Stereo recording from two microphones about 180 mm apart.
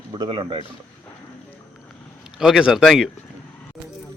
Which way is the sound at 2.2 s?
Centre (ahead or behind).